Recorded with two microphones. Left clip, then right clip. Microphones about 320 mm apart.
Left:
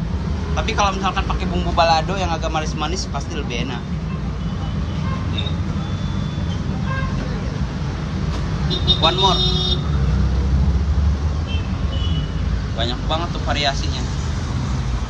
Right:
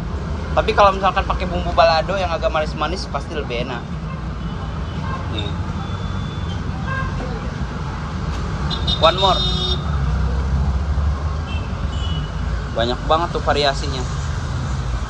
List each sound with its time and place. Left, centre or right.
0.6 s speech: centre
9.0 s speech: centre
12.8 s speech: centre